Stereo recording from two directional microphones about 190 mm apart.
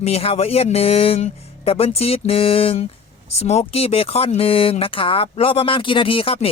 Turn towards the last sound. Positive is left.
turn(degrees=30)  # may be behind; listen again after turning